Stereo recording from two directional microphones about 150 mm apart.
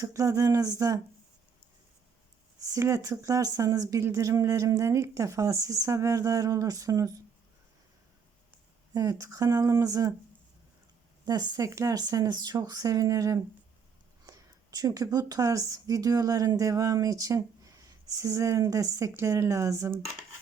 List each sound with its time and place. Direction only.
0.0 s a woman's voice: 20° right (ahead or behind)
2.6 s a woman's voice: 20° right (ahead or behind)
8.9 s a woman's voice: 25° right (ahead or behind)
11.3 s a woman's voice: 25° right (ahead or behind)